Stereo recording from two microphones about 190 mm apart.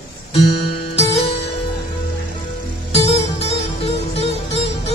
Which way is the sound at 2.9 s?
30° left (ahead or behind).